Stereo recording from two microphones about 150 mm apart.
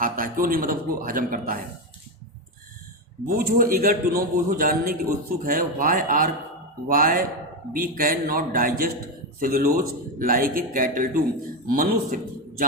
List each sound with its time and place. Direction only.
0.0 s a man's voice: 70° right (ahead or behind)
3.2 s a man's voice: 75° right (ahead or behind)